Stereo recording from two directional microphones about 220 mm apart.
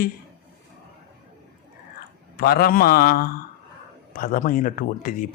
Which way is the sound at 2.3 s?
45° left (ahead or behind).